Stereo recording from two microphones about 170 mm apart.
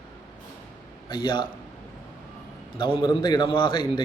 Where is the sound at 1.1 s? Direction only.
30° left (ahead or behind).